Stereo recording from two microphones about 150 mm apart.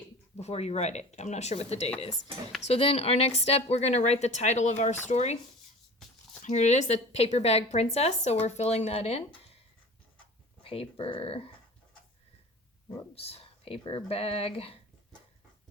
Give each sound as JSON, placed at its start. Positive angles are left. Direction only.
{"t": 0.3, "sound": "speech", "side_deg": 45}
{"t": 6.4, "sound": "speech", "side_deg": 55}
{"t": 10.6, "sound": "speech", "side_deg": 40}
{"t": 13.1, "sound": "speech", "side_deg": 40}